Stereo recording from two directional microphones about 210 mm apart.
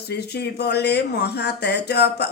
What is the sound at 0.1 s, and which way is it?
Speech, 50° left (ahead or behind).